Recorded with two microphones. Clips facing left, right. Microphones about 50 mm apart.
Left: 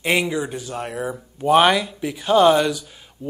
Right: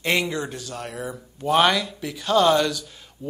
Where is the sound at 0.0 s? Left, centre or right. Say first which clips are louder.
Left 3 dB; centre.